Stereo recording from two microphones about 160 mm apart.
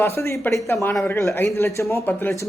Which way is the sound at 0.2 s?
15° left (ahead or behind).